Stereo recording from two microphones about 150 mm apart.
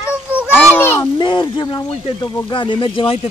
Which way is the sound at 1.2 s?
30° left (ahead or behind).